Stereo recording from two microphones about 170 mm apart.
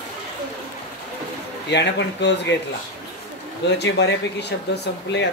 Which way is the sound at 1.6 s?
90° left.